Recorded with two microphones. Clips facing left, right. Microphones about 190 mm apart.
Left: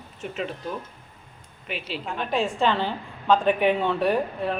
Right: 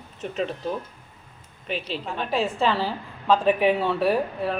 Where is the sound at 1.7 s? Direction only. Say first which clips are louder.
Right 3 dB; 35° right (ahead or behind).